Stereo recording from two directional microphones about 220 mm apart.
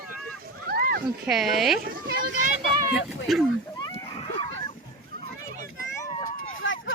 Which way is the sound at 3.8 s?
20° left (ahead or behind).